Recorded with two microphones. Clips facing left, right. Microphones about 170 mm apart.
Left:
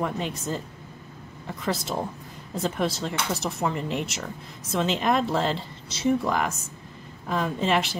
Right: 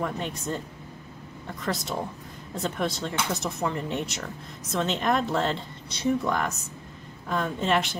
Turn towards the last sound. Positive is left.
turn(degrees=5)  # may be behind; listen again after turning